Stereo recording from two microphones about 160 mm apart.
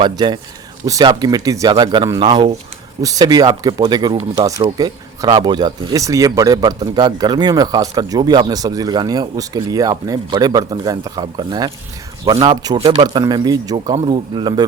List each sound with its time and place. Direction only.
0.0 s speech: 30° right (ahead or behind)